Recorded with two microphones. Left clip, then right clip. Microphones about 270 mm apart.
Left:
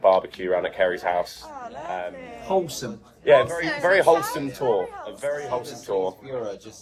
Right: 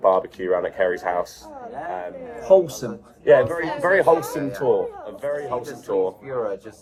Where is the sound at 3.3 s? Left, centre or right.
Left.